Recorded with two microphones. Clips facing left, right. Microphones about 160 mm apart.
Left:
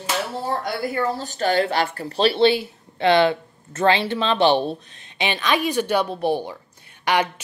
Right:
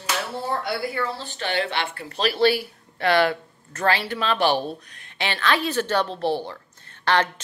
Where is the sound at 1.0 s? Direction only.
40° left (ahead or behind).